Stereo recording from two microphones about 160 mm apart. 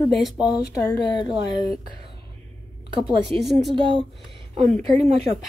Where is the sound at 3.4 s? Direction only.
Centre (ahead or behind).